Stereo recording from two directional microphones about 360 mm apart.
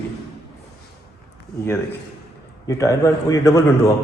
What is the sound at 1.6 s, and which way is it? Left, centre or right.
A man's voice, centre.